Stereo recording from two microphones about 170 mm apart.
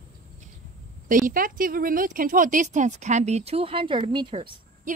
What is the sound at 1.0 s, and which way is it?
Speech, 50° right (ahead or behind).